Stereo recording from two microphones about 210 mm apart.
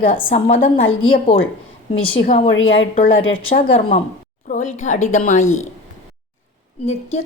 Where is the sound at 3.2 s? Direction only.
70° left (ahead or behind).